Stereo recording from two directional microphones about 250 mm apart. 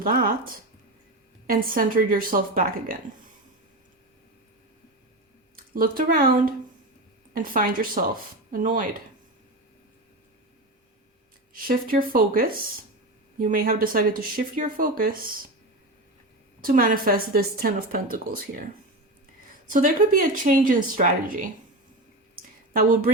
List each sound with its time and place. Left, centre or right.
0.0 s speech: right
5.5 s speech: right
11.5 s speech: right
16.6 s speech: right
19.6 s speech: right
22.7 s speech: right